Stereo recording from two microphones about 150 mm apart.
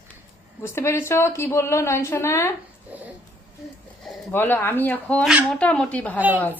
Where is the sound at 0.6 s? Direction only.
20° left (ahead or behind).